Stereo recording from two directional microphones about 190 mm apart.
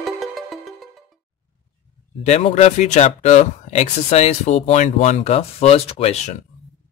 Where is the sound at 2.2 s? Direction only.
35° left (ahead or behind).